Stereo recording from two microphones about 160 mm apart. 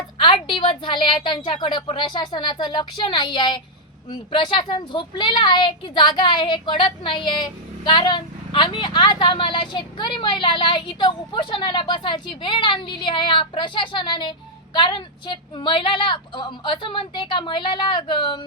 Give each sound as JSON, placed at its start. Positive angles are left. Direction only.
{"t": 0.2, "sound": "a woman's voice", "side_deg": 30}